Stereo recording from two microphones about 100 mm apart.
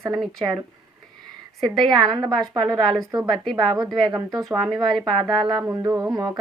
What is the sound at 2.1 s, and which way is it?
A woman's voice, 45° right (ahead or behind).